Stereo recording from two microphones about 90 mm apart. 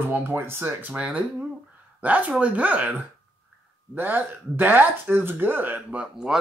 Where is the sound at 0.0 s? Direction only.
25° right (ahead or behind).